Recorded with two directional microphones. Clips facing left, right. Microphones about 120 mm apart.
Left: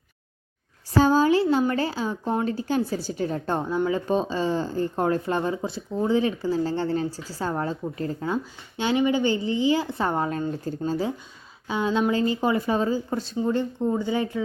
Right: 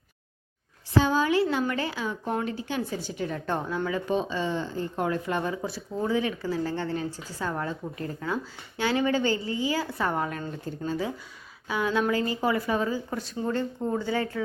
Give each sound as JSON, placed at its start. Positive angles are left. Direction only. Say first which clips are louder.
{"t": 0.9, "sound": "speech", "louder": "left 4 dB", "side_deg": 40}
{"t": 8.8, "sound": "speech", "louder": "left 3 dB", "side_deg": 20}
{"t": 13.4, "sound": "speech", "louder": "left 4 dB", "side_deg": 15}